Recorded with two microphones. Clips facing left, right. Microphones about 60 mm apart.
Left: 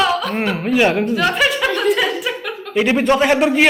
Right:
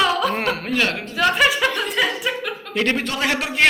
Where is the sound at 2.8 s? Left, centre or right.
Centre.